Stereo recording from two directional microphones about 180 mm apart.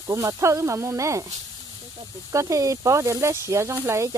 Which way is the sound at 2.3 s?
20° right (ahead or behind).